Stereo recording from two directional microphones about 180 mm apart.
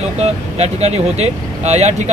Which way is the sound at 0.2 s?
35° right (ahead or behind).